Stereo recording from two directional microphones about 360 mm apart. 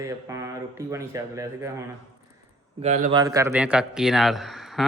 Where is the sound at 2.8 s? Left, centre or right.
Centre.